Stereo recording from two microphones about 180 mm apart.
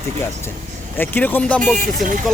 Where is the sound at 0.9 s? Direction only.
10° left (ahead or behind).